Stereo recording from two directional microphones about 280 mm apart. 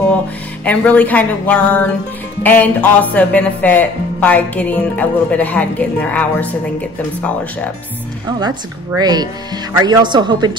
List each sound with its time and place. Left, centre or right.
0.7 s speech: centre
8.3 s a woman's voice: centre